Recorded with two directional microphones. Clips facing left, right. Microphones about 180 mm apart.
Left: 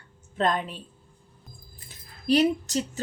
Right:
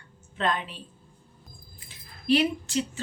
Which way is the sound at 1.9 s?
40° left (ahead or behind).